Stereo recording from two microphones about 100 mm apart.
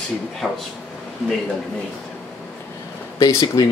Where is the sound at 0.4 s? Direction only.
10° right (ahead or behind).